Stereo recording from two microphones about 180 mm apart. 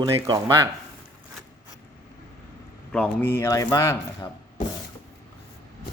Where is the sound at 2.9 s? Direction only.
5° left (ahead or behind).